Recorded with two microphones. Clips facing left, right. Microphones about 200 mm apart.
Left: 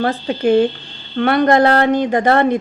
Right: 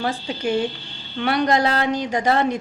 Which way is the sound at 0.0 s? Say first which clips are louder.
Left 7 dB; 55° left (ahead or behind).